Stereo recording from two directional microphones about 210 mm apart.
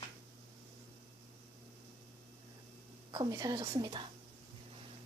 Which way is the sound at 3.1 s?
20° right (ahead or behind).